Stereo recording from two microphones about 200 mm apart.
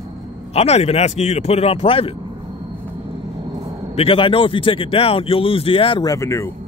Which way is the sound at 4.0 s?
25° left (ahead or behind).